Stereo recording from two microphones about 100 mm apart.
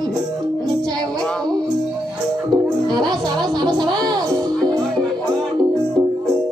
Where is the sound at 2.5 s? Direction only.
45° right (ahead or behind).